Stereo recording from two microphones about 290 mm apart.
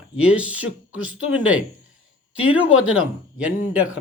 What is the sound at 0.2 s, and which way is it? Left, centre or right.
Speech, centre.